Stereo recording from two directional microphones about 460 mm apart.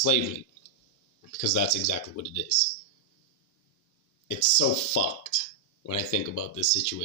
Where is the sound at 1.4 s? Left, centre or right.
Left.